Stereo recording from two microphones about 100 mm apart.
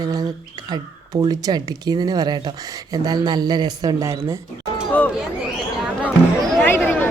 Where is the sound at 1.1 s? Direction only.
35° right (ahead or behind).